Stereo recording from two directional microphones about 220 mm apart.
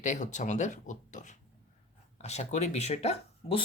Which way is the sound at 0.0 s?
35° left (ahead or behind).